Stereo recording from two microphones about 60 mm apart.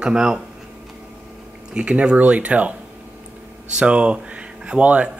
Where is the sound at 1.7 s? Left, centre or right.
Centre.